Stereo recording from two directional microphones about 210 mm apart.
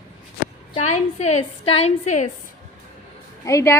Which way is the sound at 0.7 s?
35° left (ahead or behind).